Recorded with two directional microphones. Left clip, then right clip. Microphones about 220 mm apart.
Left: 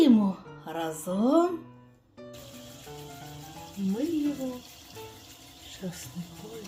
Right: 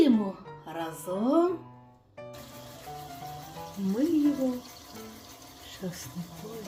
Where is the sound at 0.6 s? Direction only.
35° left (ahead or behind).